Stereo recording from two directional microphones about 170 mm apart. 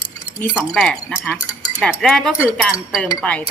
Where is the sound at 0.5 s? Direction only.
5° left (ahead or behind).